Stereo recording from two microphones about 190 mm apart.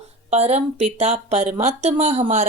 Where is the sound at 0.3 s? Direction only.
35° right (ahead or behind).